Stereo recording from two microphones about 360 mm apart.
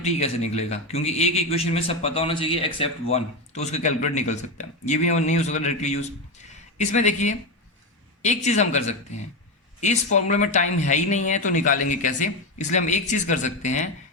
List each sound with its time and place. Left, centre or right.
0.0 s a man's voice: centre